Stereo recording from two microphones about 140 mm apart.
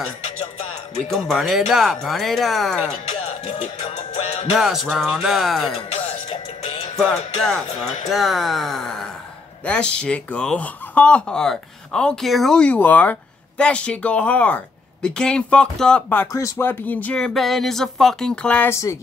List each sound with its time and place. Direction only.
1.0 s speech: centre (ahead or behind)
4.6 s speech: 5° right (ahead or behind)
7.1 s speech: 5° left (ahead or behind)
16.3 s speech: 20° left (ahead or behind)
18.7 s speech: 20° left (ahead or behind)